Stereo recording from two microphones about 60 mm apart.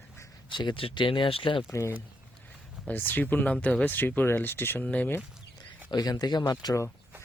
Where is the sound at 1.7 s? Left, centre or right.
Left.